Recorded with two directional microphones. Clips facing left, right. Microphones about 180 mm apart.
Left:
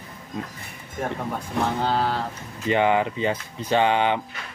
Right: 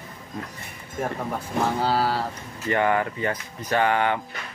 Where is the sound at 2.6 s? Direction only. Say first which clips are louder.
Left 2 dB; 20° left (ahead or behind).